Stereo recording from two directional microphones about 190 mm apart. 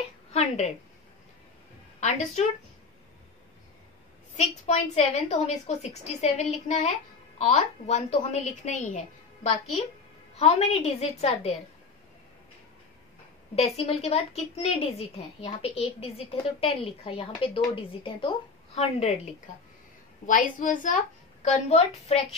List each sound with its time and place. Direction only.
0.3 s a sound: 35° left (ahead or behind)
2.0 s a woman's voice: 40° left (ahead or behind)
4.4 s a woman's voice: 35° left (ahead or behind)
13.6 s a woman's voice: 30° left (ahead or behind)
20.2 s a woman's voice: 45° left (ahead or behind)